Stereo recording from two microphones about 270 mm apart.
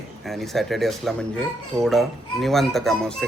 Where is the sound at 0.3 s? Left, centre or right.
Centre.